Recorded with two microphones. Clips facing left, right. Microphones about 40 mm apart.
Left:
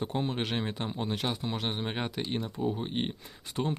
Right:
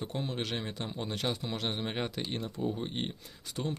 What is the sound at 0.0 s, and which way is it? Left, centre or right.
A man's voice, left.